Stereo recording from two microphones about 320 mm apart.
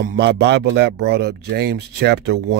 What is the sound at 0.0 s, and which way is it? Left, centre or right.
Speech, right.